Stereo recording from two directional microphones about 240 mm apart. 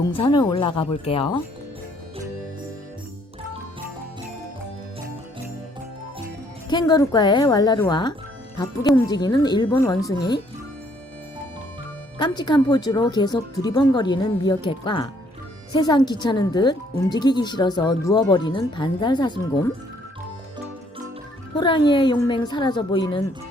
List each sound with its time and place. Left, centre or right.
0.0 s a woman's voice: centre
6.7 s speech: centre
12.2 s speech: centre
21.5 s a woman's voice: centre